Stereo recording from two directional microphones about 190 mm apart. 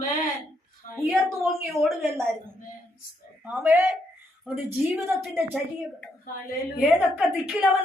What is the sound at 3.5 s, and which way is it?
Speech, 10° right (ahead or behind).